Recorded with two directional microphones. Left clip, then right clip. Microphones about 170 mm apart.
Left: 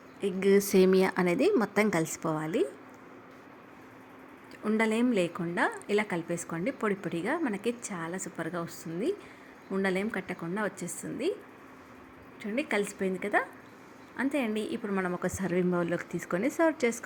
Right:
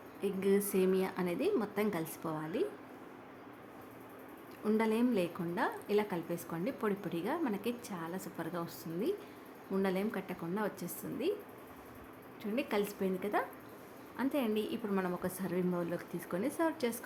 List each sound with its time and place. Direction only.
0.2 s a woman's voice: 25° left (ahead or behind)
4.8 s a woman's voice: 20° left (ahead or behind)
12.4 s a woman's voice: 15° left (ahead or behind)